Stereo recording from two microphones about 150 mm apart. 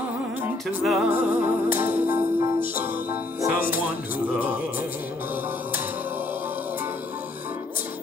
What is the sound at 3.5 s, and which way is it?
Music, 70° left (ahead or behind).